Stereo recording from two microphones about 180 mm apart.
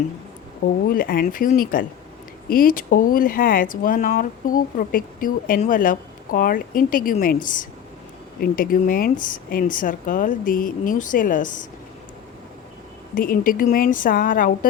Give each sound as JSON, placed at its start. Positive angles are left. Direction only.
{"t": 0.9, "sound": "speech", "side_deg": 55}
{"t": 13.1, "sound": "speech", "side_deg": 50}